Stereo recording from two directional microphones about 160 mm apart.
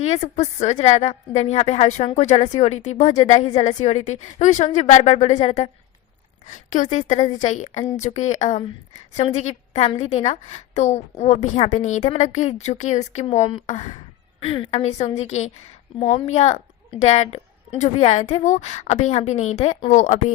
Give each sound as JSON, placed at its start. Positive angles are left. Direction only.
{"t": 0.0, "sound": "a woman's voice", "side_deg": 45}
{"t": 14.4, "sound": "a woman's voice", "side_deg": 35}